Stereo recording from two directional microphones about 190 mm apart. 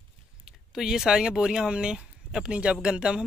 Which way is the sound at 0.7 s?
Centre (ahead or behind).